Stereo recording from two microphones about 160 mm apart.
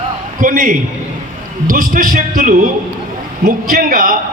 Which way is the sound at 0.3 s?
55° right (ahead or behind).